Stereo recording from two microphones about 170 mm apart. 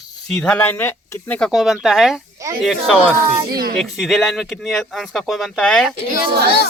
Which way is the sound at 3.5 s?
60° right (ahead or behind).